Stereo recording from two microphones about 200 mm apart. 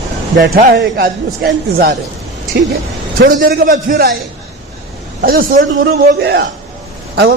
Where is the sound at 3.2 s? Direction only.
45° right (ahead or behind).